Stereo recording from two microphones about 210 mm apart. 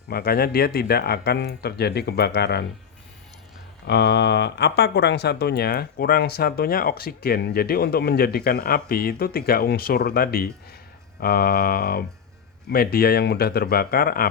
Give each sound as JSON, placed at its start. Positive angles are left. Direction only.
{"t": 0.1, "sound": "speech", "side_deg": 45}
{"t": 3.8, "sound": "speech", "side_deg": 55}